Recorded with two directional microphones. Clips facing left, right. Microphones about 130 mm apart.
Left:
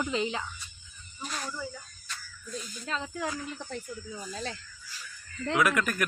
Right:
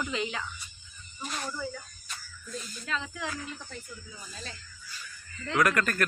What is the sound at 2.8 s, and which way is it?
Speech, 35° left (ahead or behind).